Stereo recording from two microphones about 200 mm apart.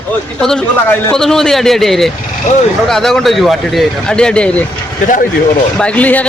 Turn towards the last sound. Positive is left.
turn(degrees=5)  # may be behind; listen again after turning